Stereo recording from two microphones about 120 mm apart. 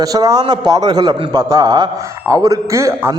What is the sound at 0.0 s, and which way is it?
A man's voice, 30° right (ahead or behind).